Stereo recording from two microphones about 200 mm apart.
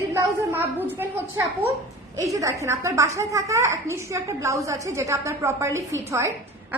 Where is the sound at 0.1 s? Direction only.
10° right (ahead or behind).